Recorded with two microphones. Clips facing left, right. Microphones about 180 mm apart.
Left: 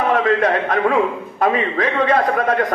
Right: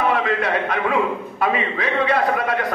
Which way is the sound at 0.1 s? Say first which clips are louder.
Left 4 dB; 45° left (ahead or behind).